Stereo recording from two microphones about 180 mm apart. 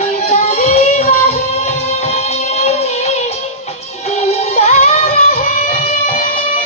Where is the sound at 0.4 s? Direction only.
40° left (ahead or behind).